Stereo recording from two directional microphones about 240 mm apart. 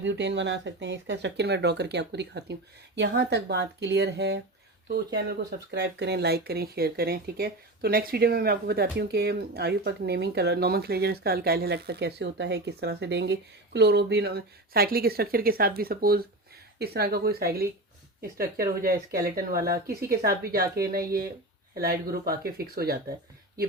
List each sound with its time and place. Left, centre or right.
0.0 s speech: right